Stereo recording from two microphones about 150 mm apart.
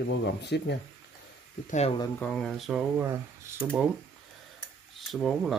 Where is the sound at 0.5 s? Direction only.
90° left.